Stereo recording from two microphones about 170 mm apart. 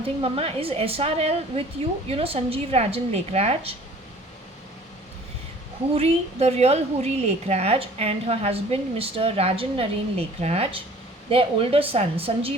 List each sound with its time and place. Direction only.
0.0 s a woman's voice: 35° right (ahead or behind)
5.9 s a woman's voice: 35° right (ahead or behind)